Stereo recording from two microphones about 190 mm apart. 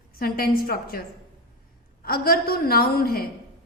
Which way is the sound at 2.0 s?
50° left (ahead or behind).